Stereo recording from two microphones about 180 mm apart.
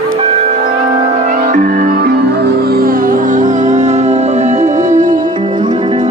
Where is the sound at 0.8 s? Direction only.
30° right (ahead or behind).